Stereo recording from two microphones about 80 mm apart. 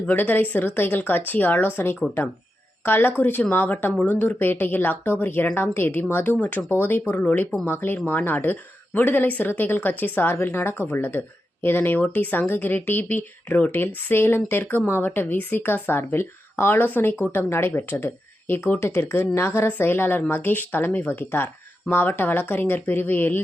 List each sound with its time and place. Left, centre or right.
0.1 s speech: left
19.6 s speech: left